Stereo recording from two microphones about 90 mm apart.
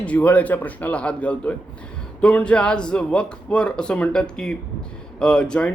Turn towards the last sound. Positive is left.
turn(degrees=10)  # may be behind; listen again after turning